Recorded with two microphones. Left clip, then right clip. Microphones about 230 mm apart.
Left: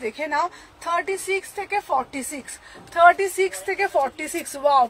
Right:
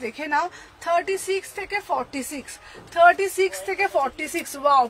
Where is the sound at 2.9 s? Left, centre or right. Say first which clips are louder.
Left 1 dB; centre.